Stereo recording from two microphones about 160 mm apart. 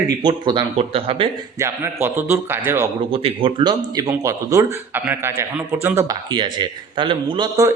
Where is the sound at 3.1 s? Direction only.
35° right (ahead or behind); by 6.0 s 15° right (ahead or behind).